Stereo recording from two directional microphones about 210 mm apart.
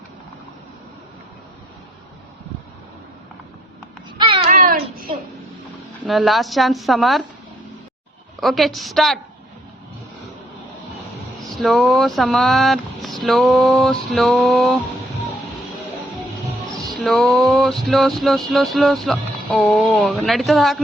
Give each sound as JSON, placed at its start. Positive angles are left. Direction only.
{"t": 4.4, "sound": "a sound", "side_deg": -40}
{"t": 6.1, "sound": "music", "side_deg": 0}
{"t": 8.4, "sound": "music", "side_deg": 0}
{"t": 11.4, "sound": "music", "side_deg": 0}
{"t": 16.7, "sound": "music", "side_deg": 0}